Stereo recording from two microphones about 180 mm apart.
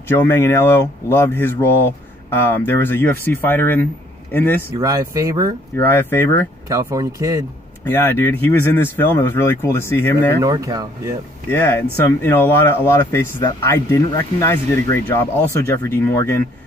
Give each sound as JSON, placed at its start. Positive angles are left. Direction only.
{"t": 0.1, "sound": "speech", "side_deg": 10}
{"t": 4.7, "sound": "speech", "side_deg": -20}
{"t": 5.9, "sound": "speech", "side_deg": 15}
{"t": 6.7, "sound": "speech", "side_deg": -15}
{"t": 7.8, "sound": "speech", "side_deg": 10}
{"t": 10.4, "sound": "speech", "side_deg": -20}
{"t": 11.5, "sound": "speech", "side_deg": 10}
{"t": 15.1, "sound": "speech", "side_deg": 15}